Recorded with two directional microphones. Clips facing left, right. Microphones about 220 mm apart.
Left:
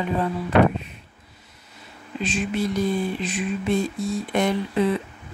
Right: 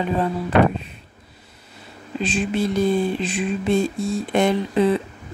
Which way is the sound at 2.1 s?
30° right (ahead or behind).